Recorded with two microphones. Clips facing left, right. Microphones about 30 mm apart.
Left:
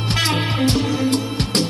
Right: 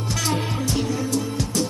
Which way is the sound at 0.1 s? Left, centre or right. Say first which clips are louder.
Left 5 dB; left.